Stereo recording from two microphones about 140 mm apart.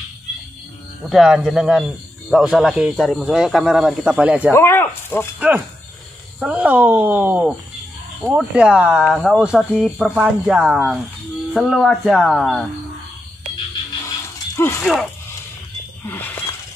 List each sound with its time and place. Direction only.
1.1 s a man's voice: 5° right (ahead or behind)
4.5 s speech: 15° left (ahead or behind)
6.4 s speech: 10° right (ahead or behind)
9.0 s speech: 10° left (ahead or behind)
9.3 s a man's voice: 5° right (ahead or behind)
14.0 s dog: 20° left (ahead or behind)
14.8 s a man's voice: 5° left (ahead or behind)
16.1 s a sound: 15° left (ahead or behind)